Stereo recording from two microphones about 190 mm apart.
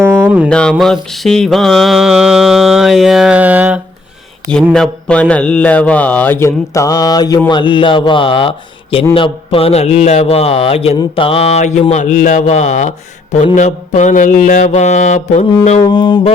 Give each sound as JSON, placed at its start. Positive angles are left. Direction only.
{"t": 0.0, "sound": "music", "side_deg": -10}
{"t": 0.5, "sound": "mantra", "side_deg": 5}
{"t": 4.7, "sound": "a man's voice", "side_deg": 5}
{"t": 15.8, "sound": "speech", "side_deg": 25}